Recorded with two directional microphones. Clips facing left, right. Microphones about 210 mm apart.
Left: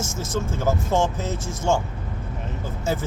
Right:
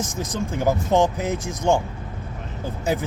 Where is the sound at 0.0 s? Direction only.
15° right (ahead or behind).